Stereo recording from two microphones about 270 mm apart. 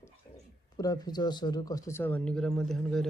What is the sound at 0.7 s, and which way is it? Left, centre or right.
Speech, centre.